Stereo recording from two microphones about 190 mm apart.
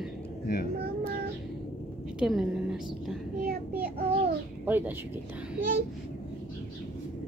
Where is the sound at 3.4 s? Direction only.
55° right (ahead or behind).